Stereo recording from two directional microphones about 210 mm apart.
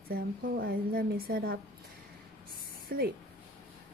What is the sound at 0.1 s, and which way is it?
A woman's voice, 45° right (ahead or behind).